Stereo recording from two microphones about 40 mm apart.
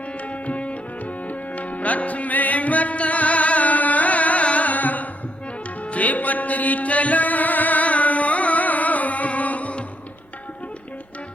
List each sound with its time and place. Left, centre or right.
0.4 s music: left